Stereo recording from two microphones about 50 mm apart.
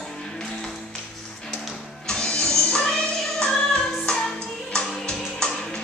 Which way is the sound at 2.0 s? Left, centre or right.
Centre.